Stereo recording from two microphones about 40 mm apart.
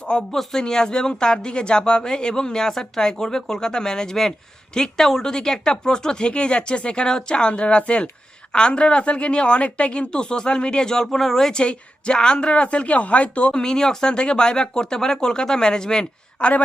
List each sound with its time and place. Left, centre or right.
0.1 s speech: left; by 11.5 s centre
11.5 s speech: left
13.6 s speech: centre
16.4 s a woman's voice: left